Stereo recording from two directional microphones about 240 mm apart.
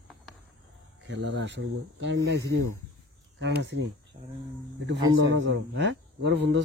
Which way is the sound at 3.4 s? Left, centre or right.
Right.